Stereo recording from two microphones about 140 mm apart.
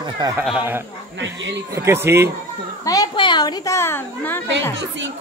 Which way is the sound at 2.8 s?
25° left (ahead or behind).